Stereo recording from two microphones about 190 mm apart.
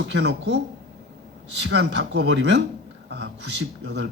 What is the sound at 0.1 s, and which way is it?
Speech, 65° right (ahead or behind).